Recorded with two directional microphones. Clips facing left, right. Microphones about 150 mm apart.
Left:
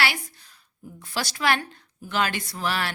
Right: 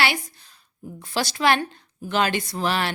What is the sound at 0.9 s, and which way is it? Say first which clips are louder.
A woman's voice: right 4 dB; 25° right (ahead or behind).